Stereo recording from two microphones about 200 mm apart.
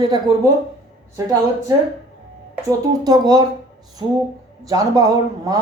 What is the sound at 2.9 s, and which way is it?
A woman's voice, 20° right (ahead or behind).